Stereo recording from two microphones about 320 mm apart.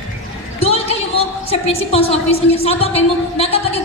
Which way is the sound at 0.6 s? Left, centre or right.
Centre.